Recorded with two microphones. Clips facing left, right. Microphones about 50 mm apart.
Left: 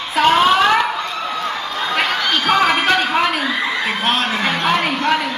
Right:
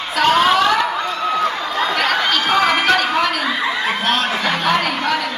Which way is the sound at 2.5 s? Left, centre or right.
Centre.